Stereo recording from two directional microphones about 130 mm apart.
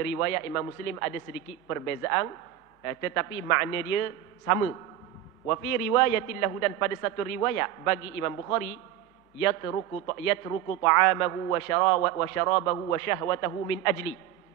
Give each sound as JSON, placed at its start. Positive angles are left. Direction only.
{"t": 0.0, "sound": "a man's voice", "side_deg": 20}